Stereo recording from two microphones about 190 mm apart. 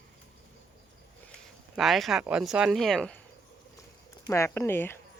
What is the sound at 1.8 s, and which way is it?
Speech, centre (ahead or behind).